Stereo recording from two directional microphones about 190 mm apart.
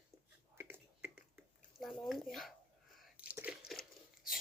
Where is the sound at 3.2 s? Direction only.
10° right (ahead or behind).